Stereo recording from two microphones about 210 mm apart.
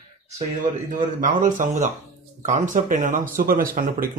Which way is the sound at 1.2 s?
35° right (ahead or behind).